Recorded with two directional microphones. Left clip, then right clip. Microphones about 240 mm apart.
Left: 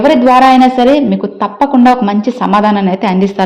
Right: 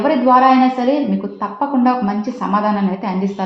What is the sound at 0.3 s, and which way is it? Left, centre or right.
A woman's voice, left.